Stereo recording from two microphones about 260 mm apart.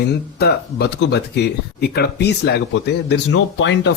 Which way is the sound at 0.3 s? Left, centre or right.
Left.